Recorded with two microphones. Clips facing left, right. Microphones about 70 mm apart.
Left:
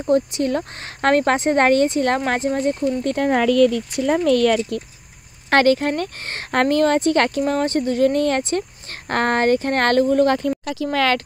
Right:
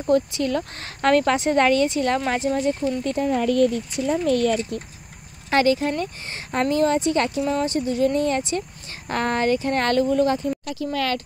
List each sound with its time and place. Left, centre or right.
0.1 s speech: left
4.3 s speech: left
5.5 s speech: left
10.6 s speech: left